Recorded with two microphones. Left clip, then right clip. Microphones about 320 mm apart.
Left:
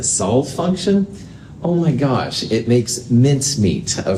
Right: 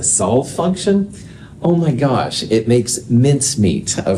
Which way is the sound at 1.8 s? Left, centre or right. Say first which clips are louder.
Right 2 dB; right.